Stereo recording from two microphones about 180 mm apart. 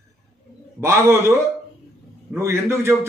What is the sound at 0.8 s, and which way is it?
A man's voice, 15° right (ahead or behind).